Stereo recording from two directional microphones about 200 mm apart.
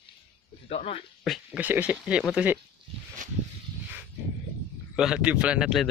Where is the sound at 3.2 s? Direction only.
40° right (ahead or behind).